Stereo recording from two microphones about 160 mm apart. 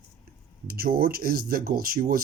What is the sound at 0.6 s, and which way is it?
Speech, 70° right (ahead or behind).